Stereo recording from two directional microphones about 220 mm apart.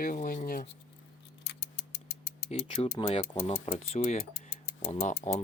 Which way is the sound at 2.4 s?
25° left (ahead or behind).